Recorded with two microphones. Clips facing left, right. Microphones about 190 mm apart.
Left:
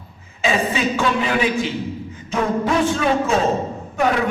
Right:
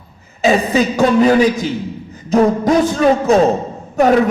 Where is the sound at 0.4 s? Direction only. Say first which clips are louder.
Right 6 dB; 40° right (ahead or behind).